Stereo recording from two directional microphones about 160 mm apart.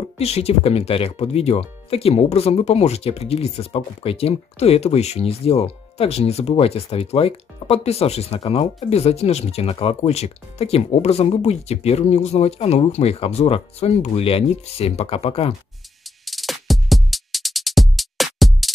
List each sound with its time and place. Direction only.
0.2 s speech: 40° left (ahead or behind)
16.3 s music: centre (ahead or behind)